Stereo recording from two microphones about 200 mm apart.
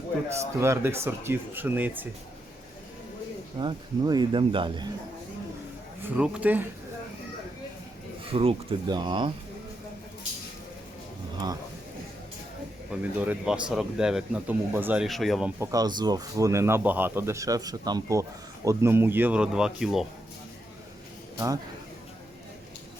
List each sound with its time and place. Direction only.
0.3 s speech: 15° right (ahead or behind)
3.6 s speech: 20° right (ahead or behind)
6.0 s speech: 5° right (ahead or behind)
8.2 s speech: 30° right (ahead or behind)
12.9 s speech: 5° right (ahead or behind)
21.3 s speech: 20° right (ahead or behind)